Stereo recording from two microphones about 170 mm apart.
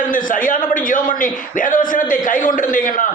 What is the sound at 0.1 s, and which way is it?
A man's voice, 50° left (ahead or behind).